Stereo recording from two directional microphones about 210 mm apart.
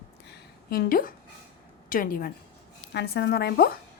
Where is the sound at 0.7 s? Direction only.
45° left (ahead or behind).